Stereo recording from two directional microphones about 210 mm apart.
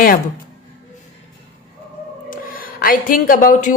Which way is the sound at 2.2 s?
45° left (ahead or behind).